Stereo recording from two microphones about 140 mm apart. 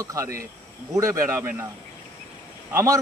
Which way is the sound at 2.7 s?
20° right (ahead or behind).